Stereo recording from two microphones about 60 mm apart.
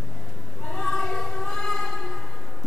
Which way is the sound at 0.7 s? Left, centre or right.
Centre.